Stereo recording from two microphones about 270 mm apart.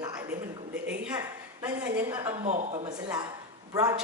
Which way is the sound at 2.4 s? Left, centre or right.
Right.